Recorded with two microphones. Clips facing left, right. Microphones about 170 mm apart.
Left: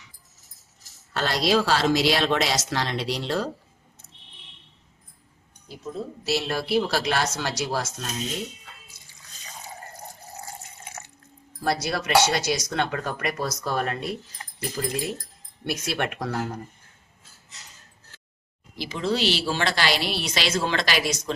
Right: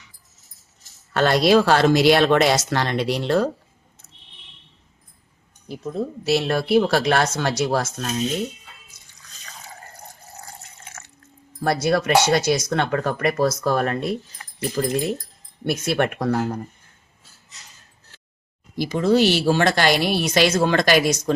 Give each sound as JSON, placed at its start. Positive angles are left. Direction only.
{"t": 1.1, "sound": "speech", "side_deg": -55}
{"t": 6.2, "sound": "speech", "side_deg": -55}
{"t": 9.5, "sound": "water", "side_deg": 20}
{"t": 11.6, "sound": "a woman's voice", "side_deg": -55}
{"t": 14.4, "sound": "keys jangling", "side_deg": 30}
{"t": 15.6, "sound": "a woman's voice", "side_deg": -55}
{"t": 18.8, "sound": "a woman's voice", "side_deg": -45}